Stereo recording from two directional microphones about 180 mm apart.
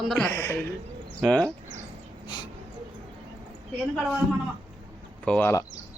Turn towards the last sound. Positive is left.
turn(degrees=15)  # may be behind; listen again after turning